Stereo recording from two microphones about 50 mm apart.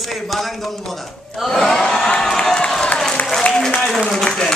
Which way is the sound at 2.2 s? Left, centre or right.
Centre.